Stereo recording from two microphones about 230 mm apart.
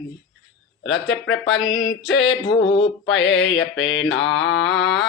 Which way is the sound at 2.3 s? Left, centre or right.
Left.